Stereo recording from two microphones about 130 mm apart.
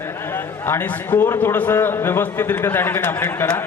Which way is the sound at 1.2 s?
15° left (ahead or behind).